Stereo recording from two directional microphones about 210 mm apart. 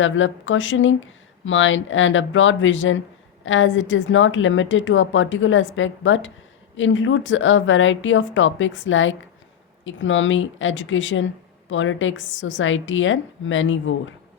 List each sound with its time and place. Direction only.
0.0 s a woman's voice: 65° left (ahead or behind)